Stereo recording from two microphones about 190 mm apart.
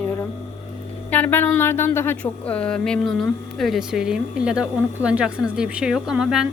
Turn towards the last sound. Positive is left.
turn(degrees=-5)  # may be behind; listen again after turning